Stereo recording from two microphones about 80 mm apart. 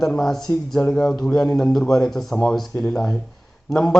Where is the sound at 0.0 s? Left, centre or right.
Centre.